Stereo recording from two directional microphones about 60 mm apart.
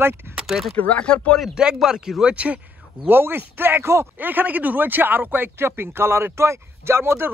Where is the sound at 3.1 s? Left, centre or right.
Right.